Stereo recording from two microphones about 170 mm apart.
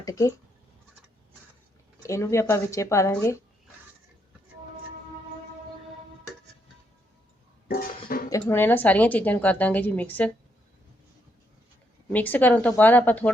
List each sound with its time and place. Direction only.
0.0 s speech: 20° left (ahead or behind)
2.0 s a woman's voice: 15° left (ahead or behind)
8.0 s dishes: 55° left (ahead or behind)
8.3 s a woman's voice: 15° left (ahead or behind)
12.1 s a woman's voice: 10° left (ahead or behind)